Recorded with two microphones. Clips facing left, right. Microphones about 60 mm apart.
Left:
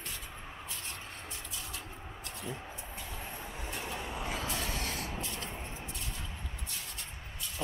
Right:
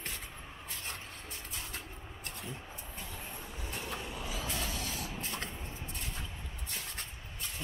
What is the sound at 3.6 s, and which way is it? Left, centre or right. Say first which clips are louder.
Train: left 1 dB; centre.